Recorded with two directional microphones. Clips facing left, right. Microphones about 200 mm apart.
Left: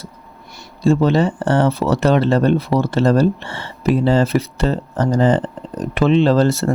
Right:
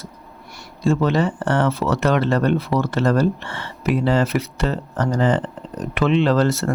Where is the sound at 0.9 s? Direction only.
30° left (ahead or behind).